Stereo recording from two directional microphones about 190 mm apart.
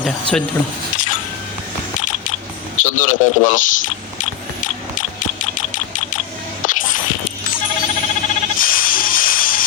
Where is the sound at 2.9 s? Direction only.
40° left (ahead or behind).